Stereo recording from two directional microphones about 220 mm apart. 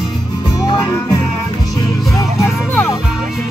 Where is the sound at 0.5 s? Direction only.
15° left (ahead or behind).